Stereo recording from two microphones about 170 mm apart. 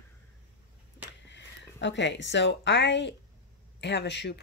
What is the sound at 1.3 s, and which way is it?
A woman's voice, 90° left.